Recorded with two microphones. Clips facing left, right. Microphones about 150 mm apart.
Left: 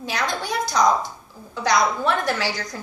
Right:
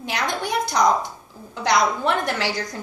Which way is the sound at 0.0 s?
20° right (ahead or behind).